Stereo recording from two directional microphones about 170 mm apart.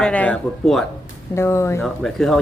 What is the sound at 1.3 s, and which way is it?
Speech, 15° left (ahead or behind).